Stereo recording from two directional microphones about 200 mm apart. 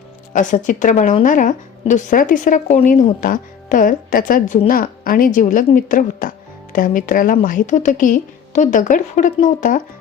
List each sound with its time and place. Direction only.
0.3 s a woman's voice: 40° left (ahead or behind)